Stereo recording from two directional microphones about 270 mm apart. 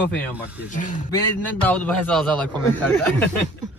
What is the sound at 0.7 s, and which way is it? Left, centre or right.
Speech, left.